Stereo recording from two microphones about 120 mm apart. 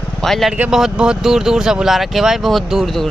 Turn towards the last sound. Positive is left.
turn(degrees=0)  # may be behind; listen again after turning